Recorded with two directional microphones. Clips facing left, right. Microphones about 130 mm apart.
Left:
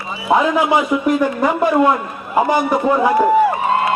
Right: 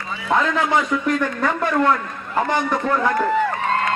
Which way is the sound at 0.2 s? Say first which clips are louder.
Left 5 dB; 20° left (ahead or behind).